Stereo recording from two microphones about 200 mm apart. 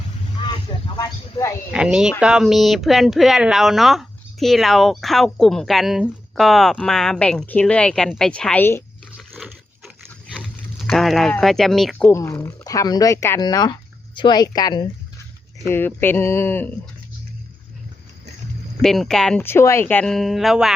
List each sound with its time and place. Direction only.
0.7 s a sound: 20° left (ahead or behind)
1.7 s speech: 5° right (ahead or behind)
9.1 s dog: centre (ahead or behind)
10.8 s speech: centre (ahead or behind)
18.8 s speech: centre (ahead or behind)